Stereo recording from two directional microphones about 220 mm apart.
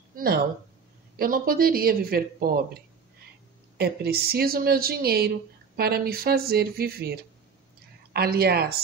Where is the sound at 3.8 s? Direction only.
45° right (ahead or behind).